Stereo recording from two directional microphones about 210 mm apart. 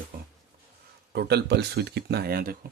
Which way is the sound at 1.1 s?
50° right (ahead or behind).